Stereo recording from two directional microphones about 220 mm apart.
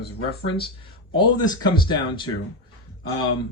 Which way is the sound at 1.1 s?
20° left (ahead or behind).